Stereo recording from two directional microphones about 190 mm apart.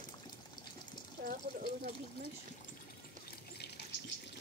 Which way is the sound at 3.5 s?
60° left (ahead or behind).